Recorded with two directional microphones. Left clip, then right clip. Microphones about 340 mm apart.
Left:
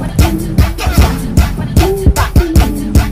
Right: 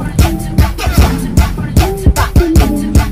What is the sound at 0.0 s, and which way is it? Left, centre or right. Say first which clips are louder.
Music: left 1 dB; centre.